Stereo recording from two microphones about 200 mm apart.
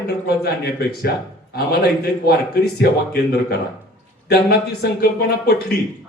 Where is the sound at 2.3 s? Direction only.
50° left (ahead or behind).